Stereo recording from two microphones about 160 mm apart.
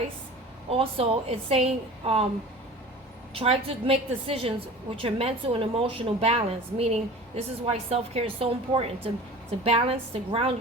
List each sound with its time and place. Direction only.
0.7 s a woman's voice: 35° right (ahead or behind)
3.3 s a woman's voice: 35° right (ahead or behind)